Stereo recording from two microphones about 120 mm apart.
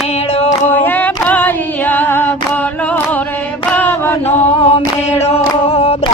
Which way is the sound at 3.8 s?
15° left (ahead or behind).